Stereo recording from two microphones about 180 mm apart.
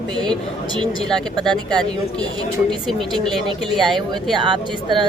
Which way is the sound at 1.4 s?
5° left (ahead or behind).